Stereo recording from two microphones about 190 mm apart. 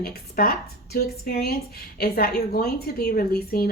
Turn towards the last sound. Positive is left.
turn(degrees=50)  # may be behind; listen again after turning